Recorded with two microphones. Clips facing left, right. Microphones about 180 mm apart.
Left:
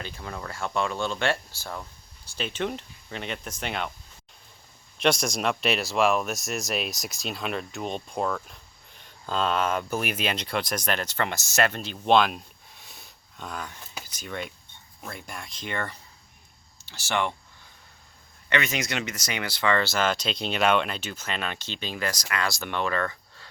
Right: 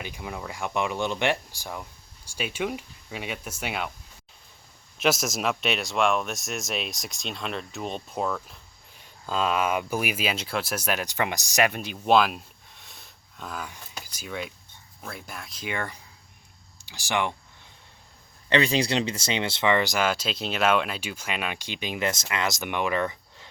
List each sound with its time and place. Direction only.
0.0 s speech: 15° right (ahead or behind)
4.9 s speech: 5° right (ahead or behind)
18.4 s speech: 30° right (ahead or behind)